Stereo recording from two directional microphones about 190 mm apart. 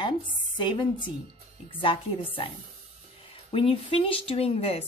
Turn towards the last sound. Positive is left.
turn(degrees=30)  # may be behind; listen again after turning